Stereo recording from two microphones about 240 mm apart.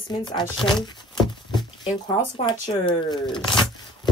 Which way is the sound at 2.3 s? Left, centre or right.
Centre.